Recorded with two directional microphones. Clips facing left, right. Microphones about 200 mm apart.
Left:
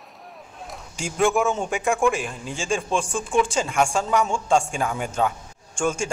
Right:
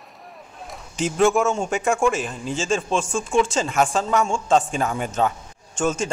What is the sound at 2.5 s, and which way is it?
A man's voice, 15° left (ahead or behind).